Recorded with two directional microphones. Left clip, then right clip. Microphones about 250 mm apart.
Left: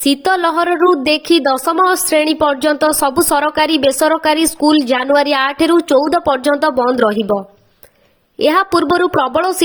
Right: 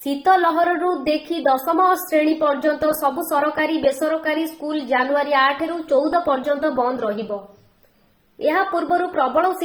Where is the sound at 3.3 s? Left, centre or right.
Left.